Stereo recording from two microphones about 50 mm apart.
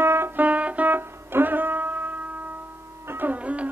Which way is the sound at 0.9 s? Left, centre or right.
Right.